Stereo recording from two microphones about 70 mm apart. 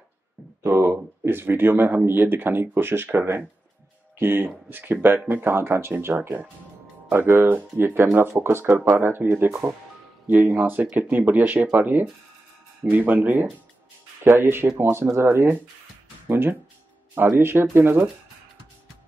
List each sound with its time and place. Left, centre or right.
0.7 s speech: right
16.3 s speech: right